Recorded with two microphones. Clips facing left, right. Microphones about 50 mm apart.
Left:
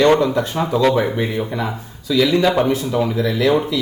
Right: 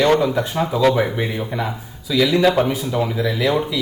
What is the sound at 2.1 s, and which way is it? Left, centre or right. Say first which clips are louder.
A man's voice: even; centre.